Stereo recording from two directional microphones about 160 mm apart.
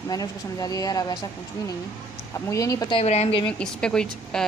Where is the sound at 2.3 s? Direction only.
20° left (ahead or behind).